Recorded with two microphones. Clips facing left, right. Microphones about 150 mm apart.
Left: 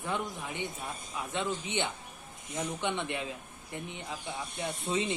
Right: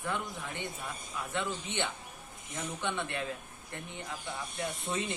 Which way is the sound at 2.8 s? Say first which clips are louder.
Right 1 dB; 20° left (ahead or behind).